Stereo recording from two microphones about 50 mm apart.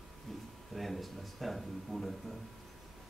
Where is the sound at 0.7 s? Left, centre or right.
Centre.